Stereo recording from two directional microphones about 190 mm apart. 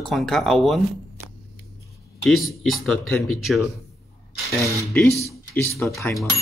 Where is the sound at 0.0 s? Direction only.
Centre (ahead or behind).